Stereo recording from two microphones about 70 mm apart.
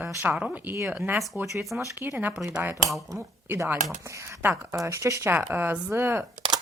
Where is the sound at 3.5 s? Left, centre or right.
Right.